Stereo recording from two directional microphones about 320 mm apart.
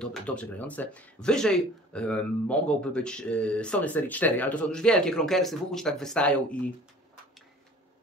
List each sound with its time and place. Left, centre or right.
0.0 s speech: centre